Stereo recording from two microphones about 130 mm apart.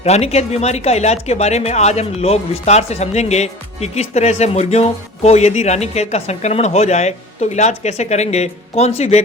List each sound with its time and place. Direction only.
0.0 s speech: 55° left (ahead or behind)